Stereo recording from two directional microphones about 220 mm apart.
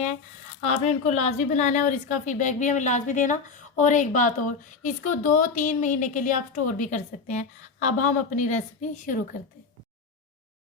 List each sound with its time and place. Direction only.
0.6 s a woman's voice: 30° left (ahead or behind)